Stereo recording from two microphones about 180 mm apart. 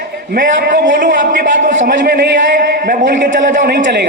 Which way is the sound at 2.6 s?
60° right (ahead or behind).